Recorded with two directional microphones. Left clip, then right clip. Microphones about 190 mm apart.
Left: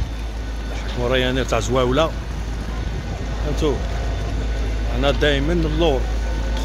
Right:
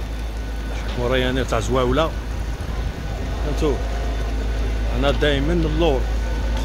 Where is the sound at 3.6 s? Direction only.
10° left (ahead or behind).